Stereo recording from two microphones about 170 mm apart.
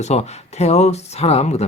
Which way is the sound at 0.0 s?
40° left (ahead or behind).